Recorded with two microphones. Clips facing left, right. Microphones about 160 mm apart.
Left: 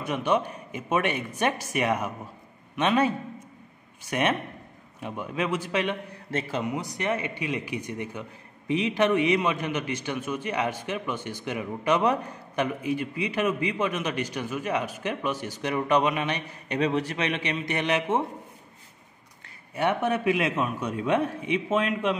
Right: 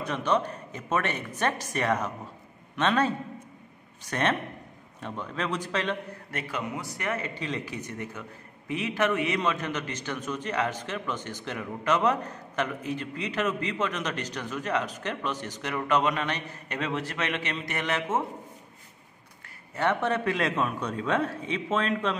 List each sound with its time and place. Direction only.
0.0 s a man's voice: 10° left (ahead or behind)
4.1 s speech: 10° left (ahead or behind)
6.3 s speech: 25° left (ahead or behind)
19.7 s speech: 10° left (ahead or behind)